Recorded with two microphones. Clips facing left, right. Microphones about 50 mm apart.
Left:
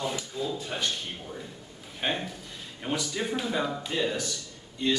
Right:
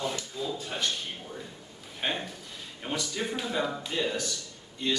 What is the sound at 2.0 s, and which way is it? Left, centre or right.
Speech, centre.